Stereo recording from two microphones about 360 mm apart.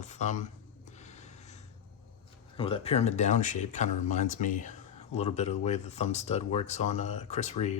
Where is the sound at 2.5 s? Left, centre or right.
Centre.